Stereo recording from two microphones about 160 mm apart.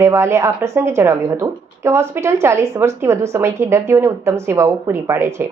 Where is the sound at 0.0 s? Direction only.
15° right (ahead or behind).